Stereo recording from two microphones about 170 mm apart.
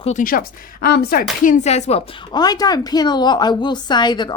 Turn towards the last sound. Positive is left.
turn(degrees=25)  # may be behind; listen again after turning